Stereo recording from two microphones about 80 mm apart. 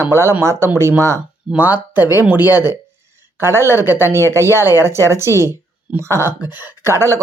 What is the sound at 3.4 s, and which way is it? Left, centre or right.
A woman's voice, right.